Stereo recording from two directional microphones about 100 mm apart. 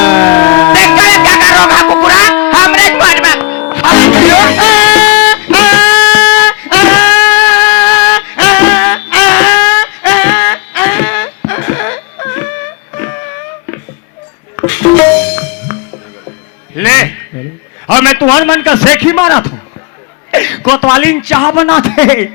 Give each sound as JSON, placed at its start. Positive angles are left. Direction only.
{"t": 0.0, "sound": "music", "side_deg": 25}
{"t": 16.7, "sound": "a sound", "side_deg": 25}
{"t": 20.6, "sound": "a man's voice", "side_deg": 25}